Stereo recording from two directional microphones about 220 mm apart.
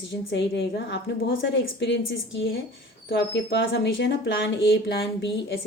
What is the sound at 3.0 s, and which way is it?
Speech, 50° left (ahead or behind).